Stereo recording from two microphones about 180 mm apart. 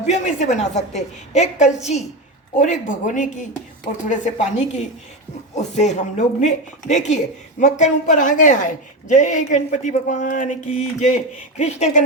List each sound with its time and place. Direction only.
0.0 s a woman's voice: 40° left (ahead or behind)